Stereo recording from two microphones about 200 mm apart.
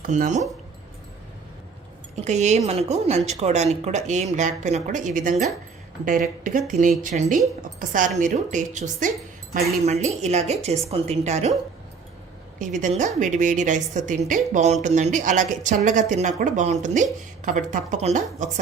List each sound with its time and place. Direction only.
0.0 s a woman's voice: 40° right (ahead or behind)
2.2 s a woman's voice: 35° right (ahead or behind)
12.5 s a woman's voice: 40° right (ahead or behind)